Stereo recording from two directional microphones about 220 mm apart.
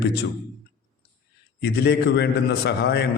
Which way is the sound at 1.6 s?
50° left (ahead or behind).